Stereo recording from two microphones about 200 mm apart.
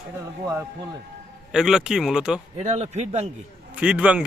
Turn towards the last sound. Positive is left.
turn(degrees=-5)  # may be behind; listen again after turning